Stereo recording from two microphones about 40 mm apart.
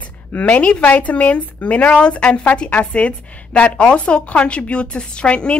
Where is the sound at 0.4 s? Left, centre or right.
Left.